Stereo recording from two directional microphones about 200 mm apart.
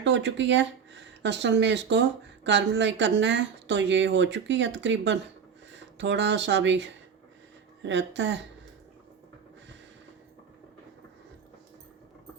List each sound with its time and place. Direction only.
0.0 s speech: 65° right (ahead or behind)